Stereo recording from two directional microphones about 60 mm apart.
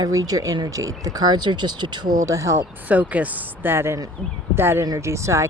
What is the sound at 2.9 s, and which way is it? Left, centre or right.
Speech, right.